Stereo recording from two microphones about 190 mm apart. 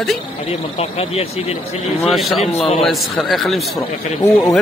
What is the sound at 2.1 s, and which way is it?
A man's voice, centre (ahead or behind).